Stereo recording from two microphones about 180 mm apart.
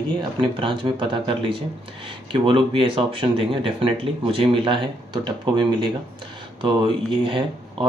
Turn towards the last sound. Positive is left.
turn(degrees=-30)  # may be behind; listen again after turning